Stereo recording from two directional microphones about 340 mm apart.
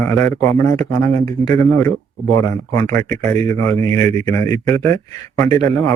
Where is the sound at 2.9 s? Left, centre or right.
Centre.